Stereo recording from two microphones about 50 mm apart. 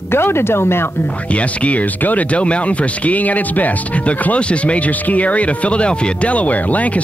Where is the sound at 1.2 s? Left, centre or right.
Left.